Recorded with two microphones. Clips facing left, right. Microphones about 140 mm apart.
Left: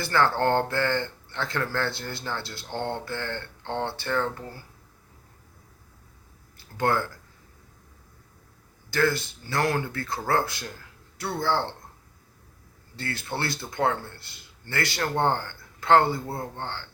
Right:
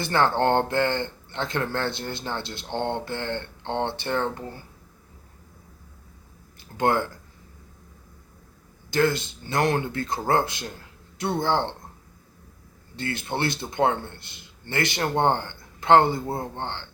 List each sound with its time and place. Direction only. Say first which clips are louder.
0.0 s speech: right 2 dB; 20° right (ahead or behind)
6.6 s speech: right 2 dB; 20° right (ahead or behind)
8.9 s speech: right 2 dB; 20° right (ahead or behind)
13.0 s speech: right 4 dB; 20° right (ahead or behind)